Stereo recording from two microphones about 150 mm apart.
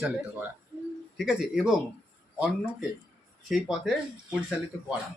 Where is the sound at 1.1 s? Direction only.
Centre (ahead or behind).